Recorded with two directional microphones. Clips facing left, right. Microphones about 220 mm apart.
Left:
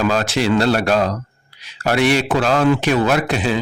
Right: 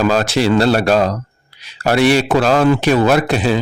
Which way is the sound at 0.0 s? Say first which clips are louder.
Right 3 dB; 35° right (ahead or behind).